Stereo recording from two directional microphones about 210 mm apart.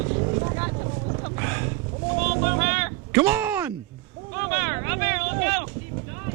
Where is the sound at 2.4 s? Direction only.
10° right (ahead or behind).